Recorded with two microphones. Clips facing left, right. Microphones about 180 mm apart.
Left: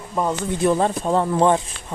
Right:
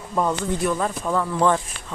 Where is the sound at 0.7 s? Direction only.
30° left (ahead or behind).